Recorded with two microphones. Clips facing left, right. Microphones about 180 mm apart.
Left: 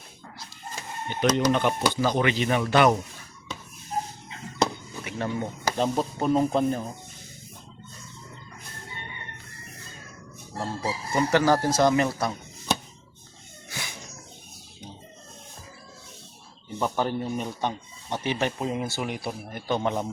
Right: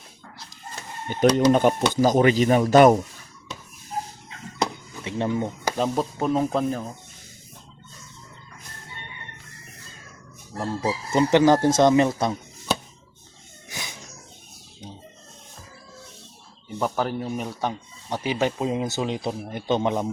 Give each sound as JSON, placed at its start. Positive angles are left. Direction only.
{"t": 1.1, "sound": "speech", "side_deg": -40}
{"t": 5.0, "sound": "speech", "side_deg": -25}
{"t": 5.7, "sound": "speech", "side_deg": 0}
{"t": 11.1, "sound": "speech", "side_deg": -20}
{"t": 13.7, "sound": "a sound", "side_deg": -20}
{"t": 16.7, "sound": "speech", "side_deg": -5}